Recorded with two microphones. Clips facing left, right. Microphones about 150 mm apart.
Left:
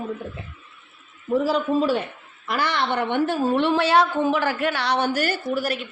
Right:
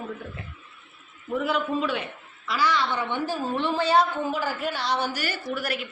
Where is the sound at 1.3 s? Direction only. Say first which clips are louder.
Left 5 dB; 35° left (ahead or behind).